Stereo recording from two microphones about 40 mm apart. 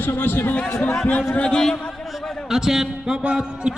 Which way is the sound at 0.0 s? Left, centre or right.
Left.